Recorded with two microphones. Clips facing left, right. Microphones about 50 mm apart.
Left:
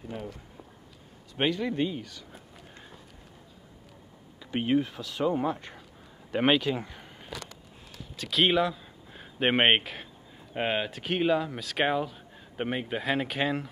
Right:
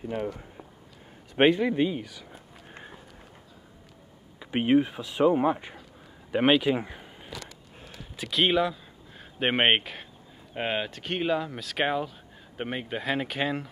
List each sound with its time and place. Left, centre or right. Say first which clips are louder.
1.3 s a man's voice: right 7 dB; right
1.6 s speech: right 4 dB; centre
2.7 s run: right 7 dB; right
4.4 s speech: right 4 dB; right
6.3 s speech: right 2 dB; centre
6.6 s speech: right 4 dB; centre
7.0 s a sound: right 1 dB; centre
8.3 s speech: even; centre